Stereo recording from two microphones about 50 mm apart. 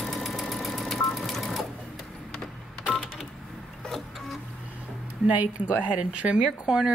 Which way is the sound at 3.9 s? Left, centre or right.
Centre.